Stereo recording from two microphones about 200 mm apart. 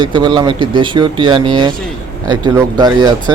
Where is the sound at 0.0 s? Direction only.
25° right (ahead or behind).